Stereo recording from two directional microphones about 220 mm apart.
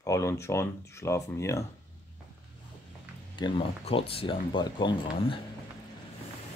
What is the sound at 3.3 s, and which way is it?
Speech, 20° left (ahead or behind).